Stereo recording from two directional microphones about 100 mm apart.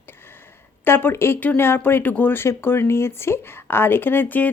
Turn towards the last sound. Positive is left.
turn(degrees=20)  # may be behind; listen again after turning